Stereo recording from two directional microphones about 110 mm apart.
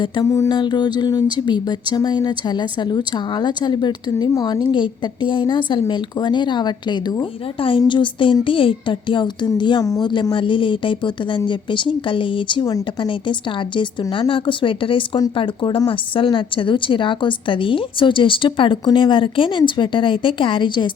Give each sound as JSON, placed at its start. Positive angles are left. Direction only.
{"t": 0.3, "sound": "mantra", "side_deg": 30}
{"t": 0.5, "sound": "speech", "side_deg": 40}